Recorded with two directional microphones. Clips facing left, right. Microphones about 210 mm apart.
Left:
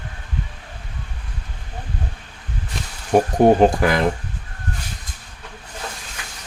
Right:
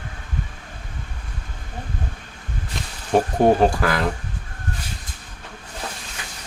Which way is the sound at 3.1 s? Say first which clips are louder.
Left 3 dB; 20° left (ahead or behind).